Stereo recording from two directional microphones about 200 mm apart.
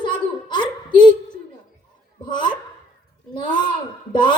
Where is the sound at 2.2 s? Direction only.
25° left (ahead or behind).